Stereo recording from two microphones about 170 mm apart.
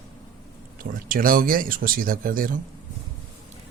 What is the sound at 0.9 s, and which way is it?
Speech, 55° right (ahead or behind).